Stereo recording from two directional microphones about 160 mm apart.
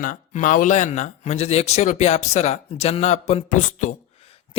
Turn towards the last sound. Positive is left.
turn(degrees=40)  # may be behind; listen again after turning